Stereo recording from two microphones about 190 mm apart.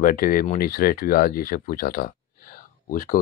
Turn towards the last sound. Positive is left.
turn(degrees=45)  # may be behind; listen again after turning